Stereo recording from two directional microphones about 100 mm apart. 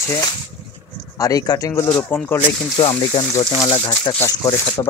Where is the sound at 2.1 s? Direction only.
20° left (ahead or behind).